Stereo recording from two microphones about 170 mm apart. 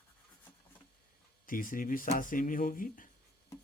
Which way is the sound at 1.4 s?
55° left (ahead or behind).